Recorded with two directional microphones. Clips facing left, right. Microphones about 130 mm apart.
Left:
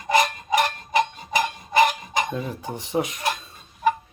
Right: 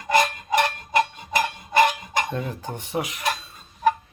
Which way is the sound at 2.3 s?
5° left (ahead or behind).